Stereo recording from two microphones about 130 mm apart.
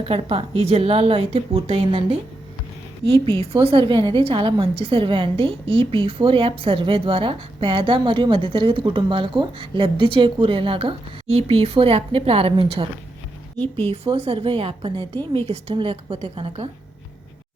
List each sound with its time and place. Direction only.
0.0 s a woman's voice: 50° right (ahead or behind)
3.6 s a woman's voice: 45° right (ahead or behind)
13.9 s a woman's voice: 50° right (ahead or behind)